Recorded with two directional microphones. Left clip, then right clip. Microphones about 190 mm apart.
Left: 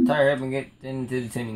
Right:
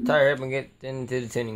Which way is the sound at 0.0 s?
50° right (ahead or behind).